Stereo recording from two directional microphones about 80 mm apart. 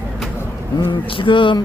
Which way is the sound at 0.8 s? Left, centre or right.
Left.